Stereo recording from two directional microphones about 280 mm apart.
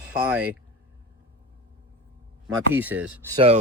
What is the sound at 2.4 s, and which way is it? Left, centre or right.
Speech, centre.